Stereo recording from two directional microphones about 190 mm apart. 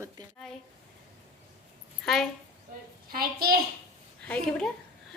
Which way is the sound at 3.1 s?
50° right (ahead or behind).